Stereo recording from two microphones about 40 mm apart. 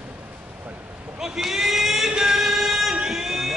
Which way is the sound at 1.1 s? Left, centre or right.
Centre.